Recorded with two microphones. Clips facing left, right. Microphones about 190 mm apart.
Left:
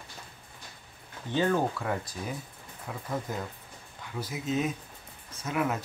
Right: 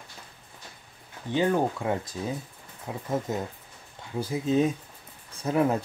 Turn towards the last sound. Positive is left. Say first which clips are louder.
# right 6 dB
turn(degrees=-30)  # may be behind; listen again after turning